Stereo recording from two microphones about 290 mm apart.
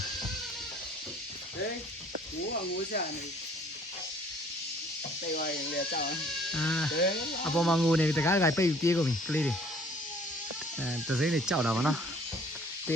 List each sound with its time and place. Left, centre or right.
5.2 s speech: left
6.5 s music: centre
7.4 s speech: centre
10.8 s speech: centre